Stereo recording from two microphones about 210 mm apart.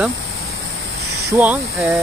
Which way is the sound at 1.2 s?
10° right (ahead or behind).